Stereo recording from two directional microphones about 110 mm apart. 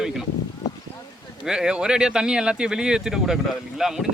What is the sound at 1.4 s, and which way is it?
Speech, 5° right (ahead or behind).